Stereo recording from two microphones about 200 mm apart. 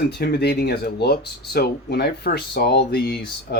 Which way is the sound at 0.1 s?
55° left (ahead or behind).